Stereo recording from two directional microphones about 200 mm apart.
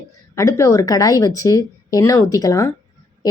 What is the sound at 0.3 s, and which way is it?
Speech, 15° left (ahead or behind).